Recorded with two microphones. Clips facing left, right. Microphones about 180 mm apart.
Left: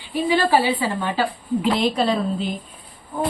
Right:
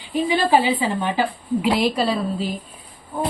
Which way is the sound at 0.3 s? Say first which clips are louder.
Even; 20° right (ahead or behind).